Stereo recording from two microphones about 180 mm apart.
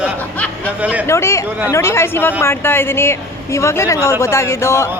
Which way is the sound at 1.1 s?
15° left (ahead or behind).